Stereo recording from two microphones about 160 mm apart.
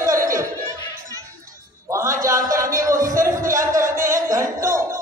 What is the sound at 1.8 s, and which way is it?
Speech, 20° right (ahead or behind).